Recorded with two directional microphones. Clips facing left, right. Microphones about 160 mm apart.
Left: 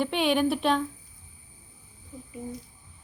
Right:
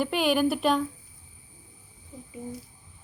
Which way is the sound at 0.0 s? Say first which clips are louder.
Even; 5° right (ahead or behind).